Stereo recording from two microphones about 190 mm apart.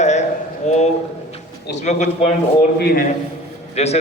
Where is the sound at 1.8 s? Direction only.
35° left (ahead or behind).